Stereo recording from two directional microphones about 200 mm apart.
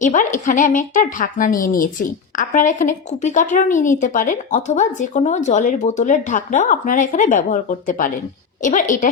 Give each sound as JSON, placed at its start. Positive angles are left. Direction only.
{"t": 0.0, "sound": "a woman's voice", "side_deg": 40}